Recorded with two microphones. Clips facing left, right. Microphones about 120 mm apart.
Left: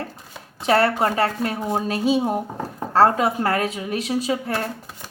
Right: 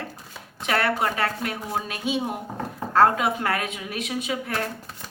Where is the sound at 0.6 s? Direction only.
35° left (ahead or behind).